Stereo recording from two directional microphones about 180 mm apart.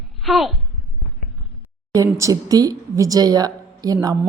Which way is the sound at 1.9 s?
15° right (ahead or behind).